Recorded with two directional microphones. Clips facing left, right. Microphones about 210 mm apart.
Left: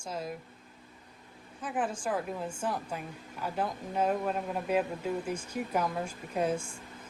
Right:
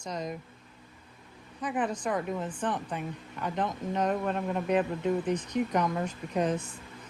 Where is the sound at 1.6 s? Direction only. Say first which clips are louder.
Right 3 dB; 5° left (ahead or behind).